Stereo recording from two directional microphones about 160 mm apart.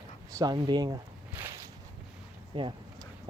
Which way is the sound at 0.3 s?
25° right (ahead or behind).